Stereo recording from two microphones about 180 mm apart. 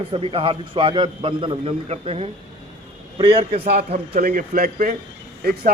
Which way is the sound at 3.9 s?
55° right (ahead or behind).